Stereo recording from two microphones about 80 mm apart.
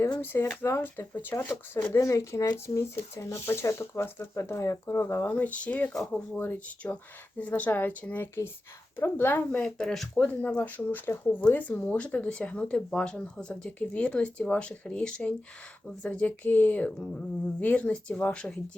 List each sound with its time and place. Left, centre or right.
0.2 s speech: left
2.0 s speech: left
5.3 s speech: centre
5.9 s speech: centre
6.1 s speech: left
9.6 s speech: centre
10.2 s speech: centre